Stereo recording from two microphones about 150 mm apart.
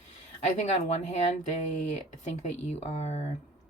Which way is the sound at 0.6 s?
45° left (ahead or behind).